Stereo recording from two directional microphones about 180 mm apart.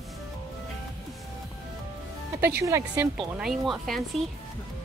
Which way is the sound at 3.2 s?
Centre (ahead or behind).